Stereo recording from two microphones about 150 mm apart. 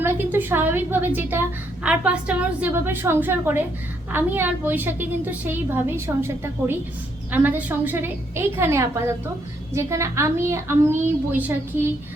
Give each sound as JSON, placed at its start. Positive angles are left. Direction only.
{"t": 0.0, "sound": "a woman's voice", "side_deg": -15}